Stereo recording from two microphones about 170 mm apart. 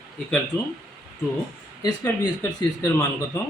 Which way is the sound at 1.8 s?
25° left (ahead or behind).